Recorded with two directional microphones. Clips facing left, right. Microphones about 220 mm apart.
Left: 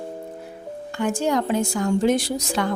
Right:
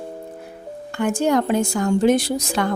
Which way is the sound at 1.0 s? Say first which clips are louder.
Right 3 dB; 55° right (ahead or behind).